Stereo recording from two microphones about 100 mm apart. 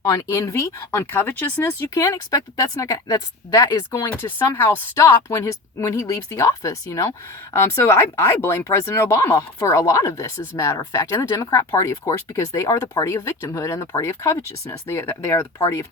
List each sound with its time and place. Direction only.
0.0 s speech: 30° left (ahead or behind)
1.9 s speech: 35° left (ahead or behind)